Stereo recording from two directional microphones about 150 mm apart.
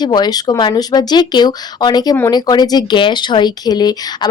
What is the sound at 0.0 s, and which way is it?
Speech, 30° left (ahead or behind).